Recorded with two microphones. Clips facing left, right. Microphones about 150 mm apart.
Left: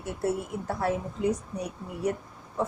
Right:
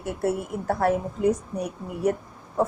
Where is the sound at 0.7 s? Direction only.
55° right (ahead or behind).